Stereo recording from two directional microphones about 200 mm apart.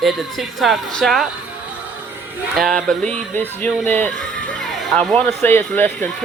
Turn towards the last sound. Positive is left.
turn(degrees=10)  # may be behind; listen again after turning